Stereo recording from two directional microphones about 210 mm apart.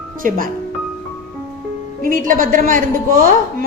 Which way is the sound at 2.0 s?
40° right (ahead or behind).